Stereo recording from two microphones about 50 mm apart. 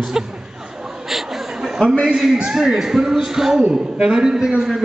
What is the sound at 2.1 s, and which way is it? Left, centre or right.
A man's voice, centre.